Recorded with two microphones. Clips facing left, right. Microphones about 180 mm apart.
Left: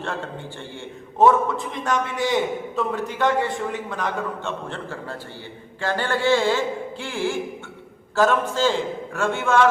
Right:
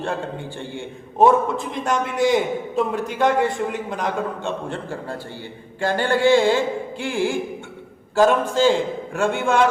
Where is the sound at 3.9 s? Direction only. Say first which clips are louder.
Right 2 dB; 15° right (ahead or behind).